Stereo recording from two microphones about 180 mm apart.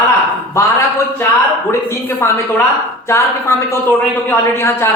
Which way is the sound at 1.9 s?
15° left (ahead or behind).